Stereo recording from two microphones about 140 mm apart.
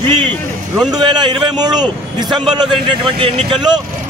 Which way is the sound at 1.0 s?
30° right (ahead or behind).